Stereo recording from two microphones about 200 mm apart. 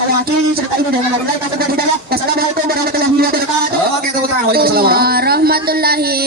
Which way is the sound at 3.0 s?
50° right (ahead or behind).